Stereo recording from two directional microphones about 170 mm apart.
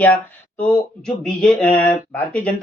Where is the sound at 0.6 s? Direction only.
5° left (ahead or behind).